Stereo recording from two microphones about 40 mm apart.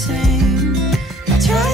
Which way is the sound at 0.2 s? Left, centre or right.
Centre.